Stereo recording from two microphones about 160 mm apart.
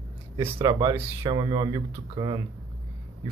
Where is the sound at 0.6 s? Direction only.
25° right (ahead or behind).